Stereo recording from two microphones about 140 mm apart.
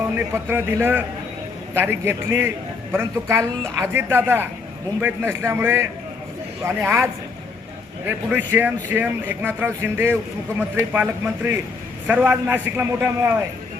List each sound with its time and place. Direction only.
0.4 s a man's voice: 15° right (ahead or behind)